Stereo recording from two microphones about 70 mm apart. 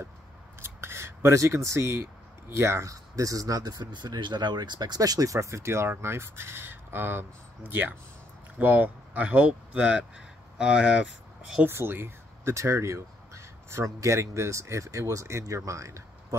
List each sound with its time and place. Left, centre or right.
0.6 s scissors: right
2.5 s speech: right; by 11.6 s centre
11.6 s speech: right
12.5 s a sound: right
13.9 s speech: right